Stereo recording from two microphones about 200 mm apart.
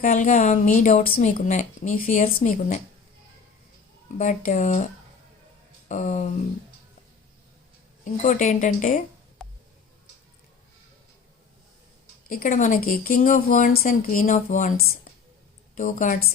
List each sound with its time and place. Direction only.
0.0 s speech: 45° left (ahead or behind)
4.2 s speech: 40° left (ahead or behind)
5.9 s speech: 35° left (ahead or behind)
8.0 s speech: 40° left (ahead or behind)
9.4 s a sound: 5° left (ahead or behind)
12.3 s a woman's voice: 40° left (ahead or behind)